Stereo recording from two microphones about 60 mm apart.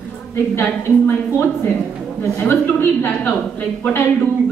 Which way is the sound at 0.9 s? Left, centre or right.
Left.